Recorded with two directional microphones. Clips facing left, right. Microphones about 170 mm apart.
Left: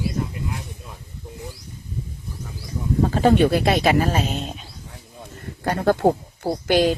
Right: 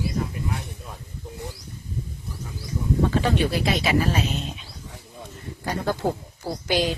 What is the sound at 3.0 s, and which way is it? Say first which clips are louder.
Speech: left 7 dB; 40° left (ahead or behind).